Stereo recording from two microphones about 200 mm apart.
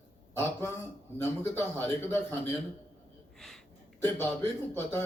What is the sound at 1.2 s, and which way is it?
Speech, 10° left (ahead or behind).